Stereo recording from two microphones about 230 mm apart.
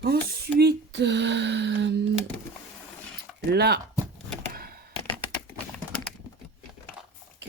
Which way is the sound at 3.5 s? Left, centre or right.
Right.